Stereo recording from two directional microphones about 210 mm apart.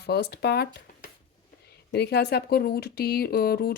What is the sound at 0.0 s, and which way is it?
Speech, 50° left (ahead or behind).